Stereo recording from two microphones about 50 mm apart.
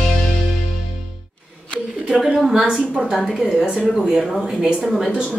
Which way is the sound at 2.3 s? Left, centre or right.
Centre.